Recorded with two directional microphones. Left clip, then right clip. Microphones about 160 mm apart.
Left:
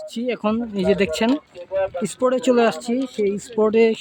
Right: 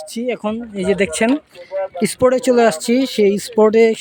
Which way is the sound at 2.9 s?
30° right (ahead or behind).